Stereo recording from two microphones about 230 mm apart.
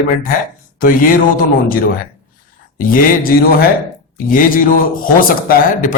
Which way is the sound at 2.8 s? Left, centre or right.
Left.